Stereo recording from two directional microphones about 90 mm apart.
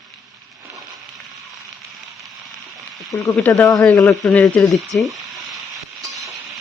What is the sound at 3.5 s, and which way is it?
Speech, 20° left (ahead or behind).